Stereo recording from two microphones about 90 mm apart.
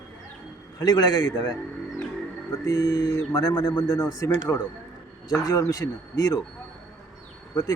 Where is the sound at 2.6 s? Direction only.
40° left (ahead or behind).